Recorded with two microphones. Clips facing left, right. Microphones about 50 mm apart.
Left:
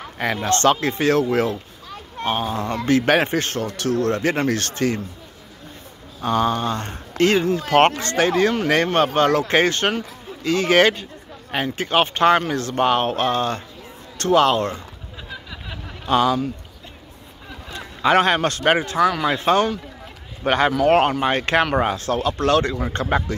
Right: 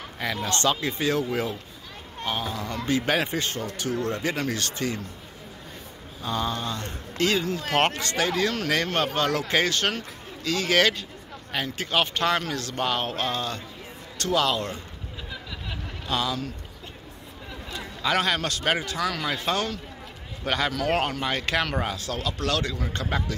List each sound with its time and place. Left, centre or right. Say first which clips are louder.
0.2 s speech: left 7 dB; left
2.2 s speech: left 7 dB; left
6.2 s speech: left 8 dB; left
16.1 s speech: left 10 dB; left
17.7 s speech: left 8 dB; left
18.9 s speech: left 9 dB; left